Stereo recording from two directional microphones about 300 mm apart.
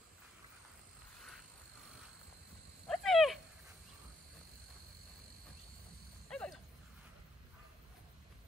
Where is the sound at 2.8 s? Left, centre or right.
Centre.